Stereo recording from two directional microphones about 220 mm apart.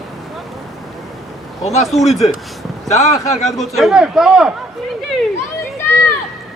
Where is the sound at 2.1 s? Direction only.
Centre (ahead or behind).